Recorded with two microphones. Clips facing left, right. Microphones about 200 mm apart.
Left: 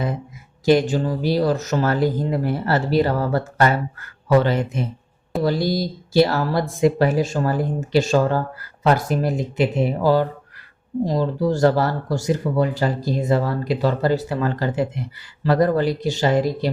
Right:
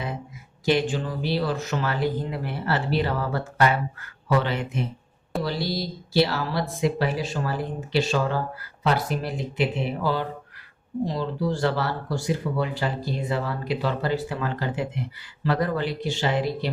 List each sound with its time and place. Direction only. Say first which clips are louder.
0.6 s speech: left 6 dB; 40° left (ahead or behind)